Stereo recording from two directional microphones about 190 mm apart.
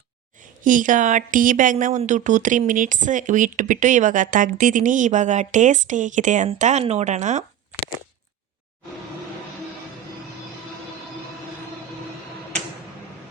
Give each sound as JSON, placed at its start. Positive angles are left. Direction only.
{"t": 0.6, "sound": "speech", "side_deg": -45}